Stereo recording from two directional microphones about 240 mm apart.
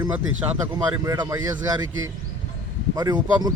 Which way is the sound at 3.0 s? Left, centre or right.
Centre.